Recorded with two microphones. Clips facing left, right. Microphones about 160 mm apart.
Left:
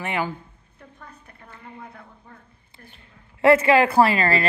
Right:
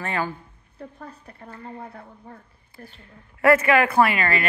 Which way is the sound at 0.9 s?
35° right (ahead or behind).